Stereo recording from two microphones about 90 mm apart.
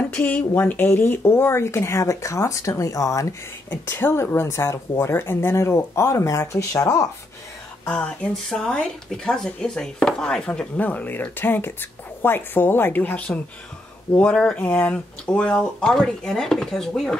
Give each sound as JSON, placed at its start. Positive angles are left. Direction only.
{"t": 0.1, "sound": "speech", "side_deg": 20}
{"t": 3.9, "sound": "speech", "side_deg": 25}
{"t": 7.8, "sound": "speech", "side_deg": 10}